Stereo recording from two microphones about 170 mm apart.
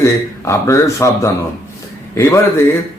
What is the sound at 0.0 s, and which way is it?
A man's voice, 15° left (ahead or behind).